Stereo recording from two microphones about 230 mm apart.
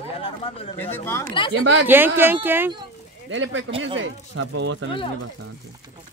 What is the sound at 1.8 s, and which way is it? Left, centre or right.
Speech, centre.